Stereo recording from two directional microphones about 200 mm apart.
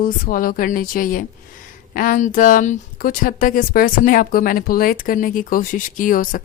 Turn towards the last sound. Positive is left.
turn(degrees=45)  # may be behind; listen again after turning